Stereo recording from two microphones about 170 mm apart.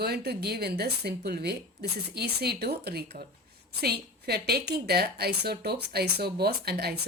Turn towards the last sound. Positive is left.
turn(degrees=-70)  # may be behind; listen again after turning